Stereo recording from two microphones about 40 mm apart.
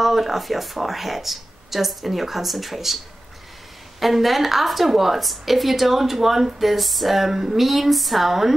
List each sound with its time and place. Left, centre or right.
0.0 s a woman's voice: centre
4.0 s a woman's voice: centre